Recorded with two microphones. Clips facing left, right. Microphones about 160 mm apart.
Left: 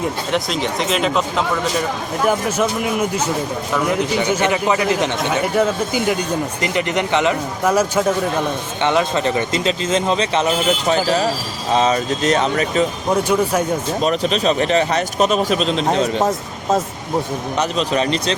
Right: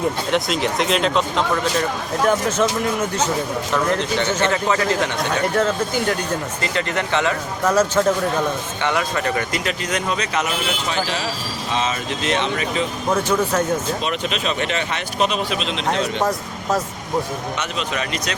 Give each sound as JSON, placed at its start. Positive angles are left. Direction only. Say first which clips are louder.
{"t": 0.0, "sound": "a man's voice", "louder": "even", "side_deg": 0}
{"t": 8.8, "sound": "speech", "louder": "left 5 dB", "side_deg": 20}
{"t": 13.2, "sound": "a man's voice", "louder": "left 2 dB", "side_deg": 10}
{"t": 14.0, "sound": "speech", "louder": "left 6 dB", "side_deg": 40}
{"t": 16.2, "sound": "speech", "louder": "left 2 dB", "side_deg": 25}
{"t": 17.6, "sound": "speech", "louder": "left 10 dB", "side_deg": 35}